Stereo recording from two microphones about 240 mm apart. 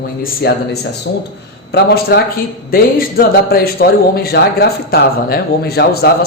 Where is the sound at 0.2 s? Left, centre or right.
Left.